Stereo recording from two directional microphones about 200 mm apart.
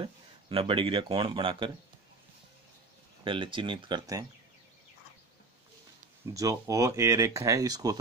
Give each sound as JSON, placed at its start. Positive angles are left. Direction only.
{"t": 0.0, "sound": "speech", "side_deg": -25}
{"t": 3.3, "sound": "speech", "side_deg": -25}
{"t": 6.3, "sound": "speech", "side_deg": -15}